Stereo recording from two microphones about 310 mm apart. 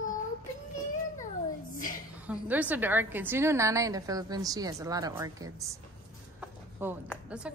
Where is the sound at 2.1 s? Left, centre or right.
Centre.